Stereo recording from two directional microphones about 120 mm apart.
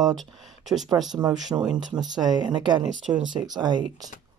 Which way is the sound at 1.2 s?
35° right (ahead or behind).